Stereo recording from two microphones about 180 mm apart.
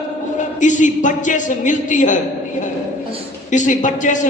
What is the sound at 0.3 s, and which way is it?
A man's voice, 45° left (ahead or behind).